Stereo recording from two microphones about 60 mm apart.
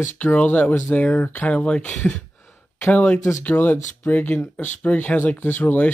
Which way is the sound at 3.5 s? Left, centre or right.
Left.